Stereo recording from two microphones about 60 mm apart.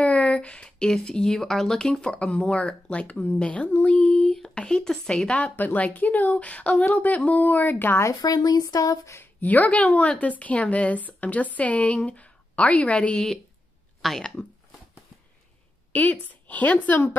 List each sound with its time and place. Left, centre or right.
0.0 s speech: centre
3.8 s a sound: left
4.6 s speech: centre
5.4 s speech: left
8.0 s speech: left
9.2 s a woman's voice: left
14.0 s speech: centre
15.9 s speech: left